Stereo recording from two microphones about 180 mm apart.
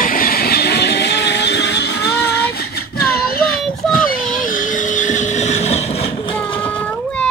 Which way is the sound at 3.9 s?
50° left (ahead or behind).